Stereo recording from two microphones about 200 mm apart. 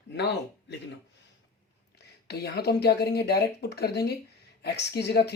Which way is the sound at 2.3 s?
55° left (ahead or behind).